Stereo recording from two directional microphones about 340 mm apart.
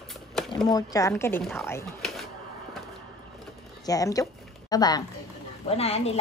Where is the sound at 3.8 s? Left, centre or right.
Centre.